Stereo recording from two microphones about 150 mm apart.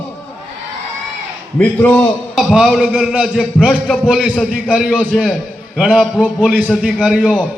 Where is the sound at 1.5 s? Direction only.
10° left (ahead or behind).